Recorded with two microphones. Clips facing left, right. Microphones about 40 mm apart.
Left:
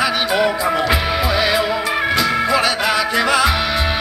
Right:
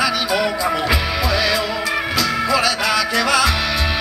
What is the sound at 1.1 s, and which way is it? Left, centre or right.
Music, left.